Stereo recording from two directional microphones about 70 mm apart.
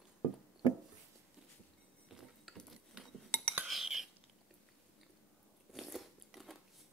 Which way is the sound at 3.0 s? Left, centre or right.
Centre.